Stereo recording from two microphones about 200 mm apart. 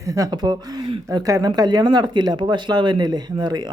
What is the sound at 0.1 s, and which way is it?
Speech, 20° right (ahead or behind).